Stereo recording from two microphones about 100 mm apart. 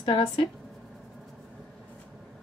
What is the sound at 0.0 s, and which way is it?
Speech, 60° left (ahead or behind).